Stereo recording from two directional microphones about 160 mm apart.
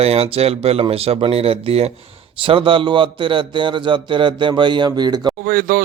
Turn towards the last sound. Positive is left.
turn(degrees=-65)  # may be behind; listen again after turning